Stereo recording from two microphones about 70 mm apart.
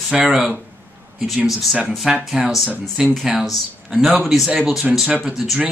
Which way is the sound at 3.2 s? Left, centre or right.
Centre.